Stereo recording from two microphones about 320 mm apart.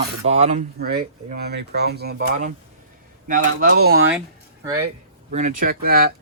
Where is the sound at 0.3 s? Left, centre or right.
Right.